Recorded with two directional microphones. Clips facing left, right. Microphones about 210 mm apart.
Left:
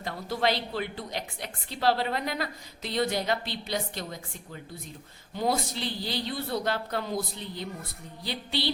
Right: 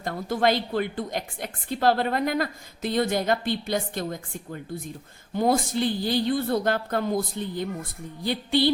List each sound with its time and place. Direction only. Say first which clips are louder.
0.0 s a woman's voice: right 5 dB; 50° right (ahead or behind)